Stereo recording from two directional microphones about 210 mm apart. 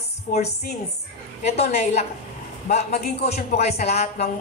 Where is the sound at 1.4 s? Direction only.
30° left (ahead or behind).